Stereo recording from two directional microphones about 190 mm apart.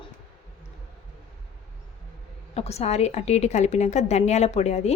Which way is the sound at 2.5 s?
35° left (ahead or behind).